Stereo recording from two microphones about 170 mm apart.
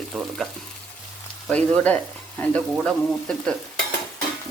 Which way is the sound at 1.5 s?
5° left (ahead or behind).